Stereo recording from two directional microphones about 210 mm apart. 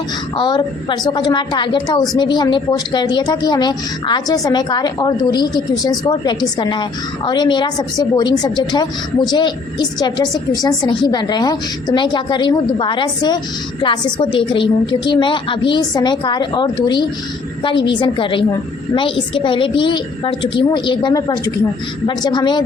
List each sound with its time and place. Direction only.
0.3 s a woman's voice: 20° left (ahead or behind)